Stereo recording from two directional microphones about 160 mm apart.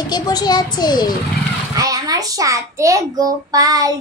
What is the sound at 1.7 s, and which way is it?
A child's voice, 20° right (ahead or behind).